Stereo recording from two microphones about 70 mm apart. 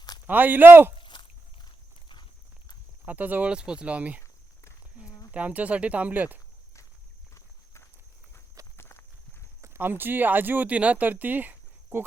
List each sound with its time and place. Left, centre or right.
0.3 s speech: right
1.1 s a sound: left
3.1 s speech: right
3.5 s speech: centre
5.3 s speech: right
7.3 s walk: left
9.6 s speech: right